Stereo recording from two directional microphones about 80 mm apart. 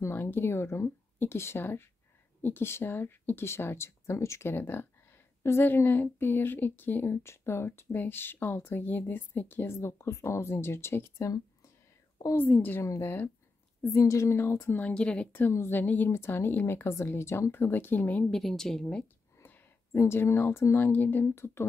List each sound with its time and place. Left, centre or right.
0.0 s a woman's voice: left
12.4 s a woman's voice: left
13.8 s speech: left
14.8 s speech: centre
15.5 s speech: left
15.8 s a woman's voice: centre
16.1 s a woman's voice: left
18.3 s a woman's voice: centre
19.3 s speech: left